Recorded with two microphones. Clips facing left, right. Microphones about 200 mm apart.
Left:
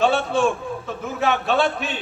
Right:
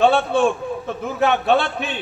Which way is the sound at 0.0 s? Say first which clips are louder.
Right 3 dB; 55° right (ahead or behind).